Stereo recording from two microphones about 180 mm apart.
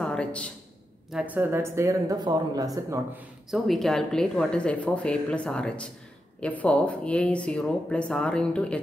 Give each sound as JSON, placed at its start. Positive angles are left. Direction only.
{"t": 0.0, "sound": "a sound", "side_deg": 5}
{"t": 1.1, "sound": "speech", "side_deg": -10}
{"t": 3.4, "sound": "speech", "side_deg": 0}